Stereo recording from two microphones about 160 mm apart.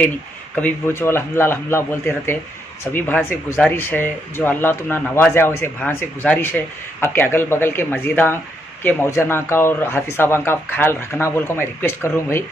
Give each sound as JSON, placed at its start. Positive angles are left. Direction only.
{"t": 0.6, "sound": "speech", "side_deg": 10}